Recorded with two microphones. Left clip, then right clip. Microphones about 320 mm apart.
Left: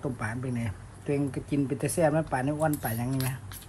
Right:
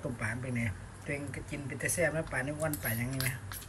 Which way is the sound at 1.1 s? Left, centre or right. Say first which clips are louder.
Left 9 dB; centre.